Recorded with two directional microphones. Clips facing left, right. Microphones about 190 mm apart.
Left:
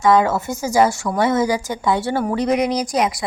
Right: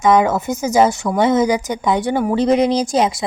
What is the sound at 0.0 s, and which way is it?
A woman's voice, 20° right (ahead or behind).